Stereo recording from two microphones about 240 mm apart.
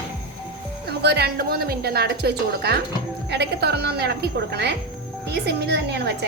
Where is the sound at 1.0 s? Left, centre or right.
Right.